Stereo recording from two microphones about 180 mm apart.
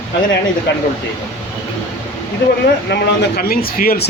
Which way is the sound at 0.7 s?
70° left (ahead or behind).